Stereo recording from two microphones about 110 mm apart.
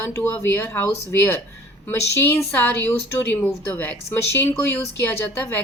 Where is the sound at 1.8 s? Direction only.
20° left (ahead or behind).